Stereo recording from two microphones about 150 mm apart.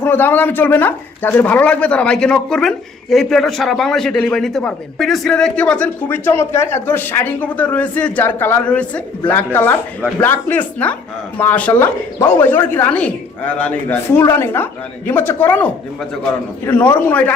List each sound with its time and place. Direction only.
0.0 s speech: 15° left (ahead or behind)